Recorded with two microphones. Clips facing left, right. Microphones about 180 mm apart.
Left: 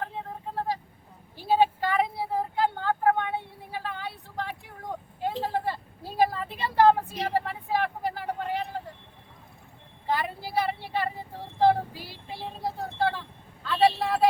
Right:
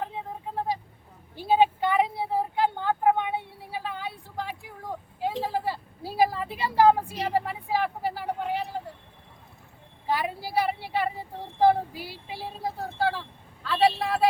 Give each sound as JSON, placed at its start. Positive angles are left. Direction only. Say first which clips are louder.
{"t": 0.2, "sound": "vehicle", "louder": "right 1 dB", "side_deg": -15}
{"t": 1.4, "sound": "a sound", "louder": "right 1 dB", "side_deg": -15}
{"t": 5.2, "sound": "vehicle", "louder": "right 1 dB", "side_deg": -10}
{"t": 10.2, "sound": "vehicle", "louder": "right 3 dB", "side_deg": -10}
{"t": 11.6, "sound": "child singing", "louder": "right 1 dB", "side_deg": -10}
{"t": 13.7, "sound": "a sound", "louder": "even", "side_deg": 0}